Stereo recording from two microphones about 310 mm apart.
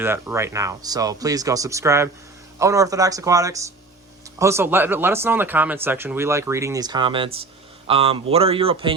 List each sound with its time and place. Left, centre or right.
0.0 s speech: centre